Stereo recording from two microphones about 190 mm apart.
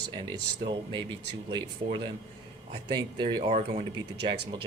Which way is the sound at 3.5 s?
35° right (ahead or behind).